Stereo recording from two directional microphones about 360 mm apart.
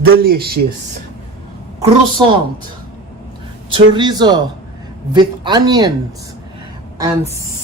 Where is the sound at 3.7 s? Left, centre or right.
Centre.